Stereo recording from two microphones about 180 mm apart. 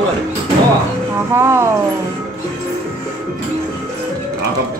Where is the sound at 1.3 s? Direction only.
15° right (ahead or behind).